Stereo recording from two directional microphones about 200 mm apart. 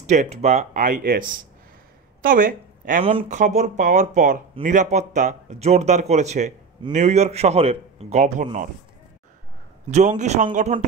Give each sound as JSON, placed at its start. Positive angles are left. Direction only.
{"t": 0.0, "sound": "a woman's voice", "side_deg": -35}
{"t": 3.0, "sound": "speech", "side_deg": -30}
{"t": 9.8, "sound": "speech", "side_deg": -35}